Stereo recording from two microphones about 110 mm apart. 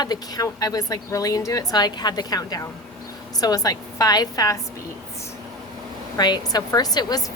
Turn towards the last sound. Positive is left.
turn(degrees=35)  # may be behind; listen again after turning